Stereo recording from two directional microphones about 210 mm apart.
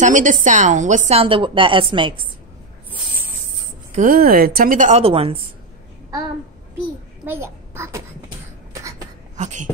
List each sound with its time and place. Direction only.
0.0 s speech: 35° right (ahead or behind)
3.9 s speech: 40° right (ahead or behind)
7.2 s a child's voice: 10° right (ahead or behind)
9.4 s speech: 35° right (ahead or behind)